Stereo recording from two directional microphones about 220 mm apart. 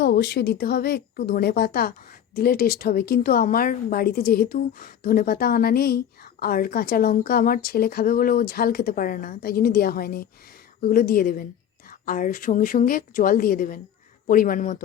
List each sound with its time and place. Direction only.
0.0 s a woman's voice: 45° left (ahead or behind)